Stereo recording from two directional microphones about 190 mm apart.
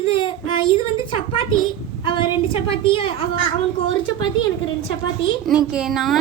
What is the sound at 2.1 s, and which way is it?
A woman's voice, 25° left (ahead or behind).